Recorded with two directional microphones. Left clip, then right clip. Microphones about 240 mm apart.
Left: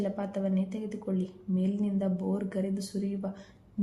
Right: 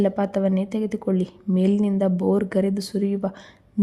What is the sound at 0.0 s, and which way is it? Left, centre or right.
A woman's voice, right.